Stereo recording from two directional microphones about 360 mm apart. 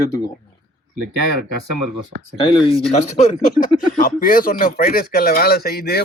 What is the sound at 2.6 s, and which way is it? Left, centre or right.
Speech, centre.